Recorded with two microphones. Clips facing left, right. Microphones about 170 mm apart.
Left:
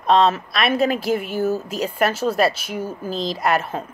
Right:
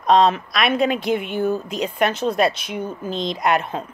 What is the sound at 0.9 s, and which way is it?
Speech, 5° left (ahead or behind).